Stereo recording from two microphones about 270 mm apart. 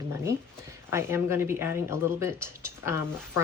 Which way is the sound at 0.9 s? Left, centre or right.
Centre.